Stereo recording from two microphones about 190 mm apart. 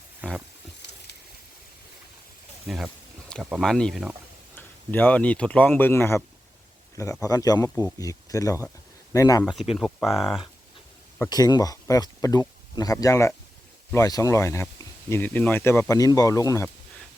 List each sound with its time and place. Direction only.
0.2 s wild animals: 5° right (ahead or behind)
2.6 s a sound: centre (ahead or behind)
3.5 s speech: centre (ahead or behind); by 9.4 s 15° left (ahead or behind)
9.4 s speech: centre (ahead or behind)
11.3 s speech: 20° left (ahead or behind)